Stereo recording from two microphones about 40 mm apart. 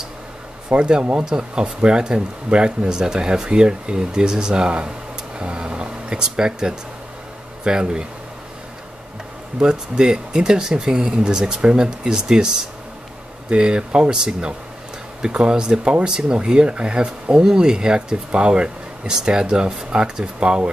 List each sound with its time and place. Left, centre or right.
0.7 s speech: right
9.6 s speech: right